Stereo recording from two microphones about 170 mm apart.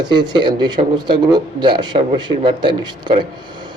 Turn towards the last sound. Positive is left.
turn(degrees=-30)  # may be behind; listen again after turning